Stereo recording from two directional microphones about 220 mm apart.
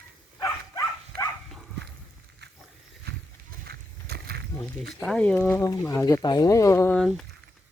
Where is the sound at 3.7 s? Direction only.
45° right (ahead or behind).